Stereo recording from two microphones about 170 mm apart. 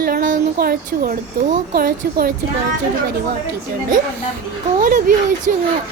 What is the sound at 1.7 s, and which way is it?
Speech, 60° right (ahead or behind).